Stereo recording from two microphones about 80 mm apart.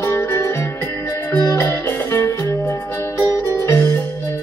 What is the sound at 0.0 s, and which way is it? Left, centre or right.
Music, left.